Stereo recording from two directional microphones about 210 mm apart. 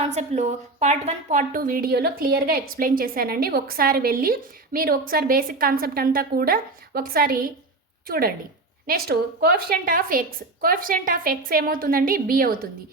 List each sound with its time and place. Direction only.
0.0 s a woman's voice: 30° right (ahead or behind)